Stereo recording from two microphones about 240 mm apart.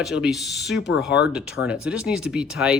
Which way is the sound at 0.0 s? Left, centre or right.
Centre.